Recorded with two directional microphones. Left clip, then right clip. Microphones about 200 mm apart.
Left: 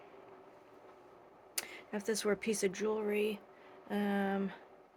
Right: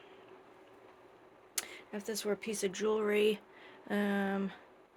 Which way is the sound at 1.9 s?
20° left (ahead or behind).